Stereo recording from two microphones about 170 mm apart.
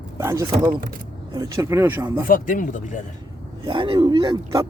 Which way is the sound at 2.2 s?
55° left (ahead or behind).